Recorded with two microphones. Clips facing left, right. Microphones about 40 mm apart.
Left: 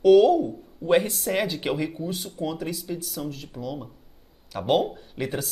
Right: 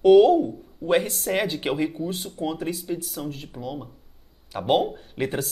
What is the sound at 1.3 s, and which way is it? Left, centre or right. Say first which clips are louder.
Speech: right 1 dB; centre.